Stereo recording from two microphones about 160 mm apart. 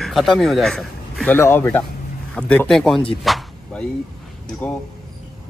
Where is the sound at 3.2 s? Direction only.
Centre (ahead or behind).